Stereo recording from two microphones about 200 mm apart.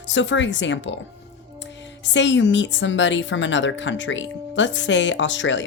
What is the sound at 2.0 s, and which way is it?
A woman's voice, 65° left (ahead or behind).